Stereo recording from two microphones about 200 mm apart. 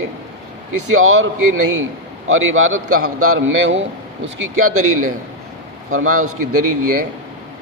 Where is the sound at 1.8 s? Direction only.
80° right.